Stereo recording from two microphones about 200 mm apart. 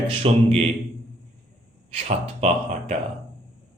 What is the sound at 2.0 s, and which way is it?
Speech, 30° right (ahead or behind).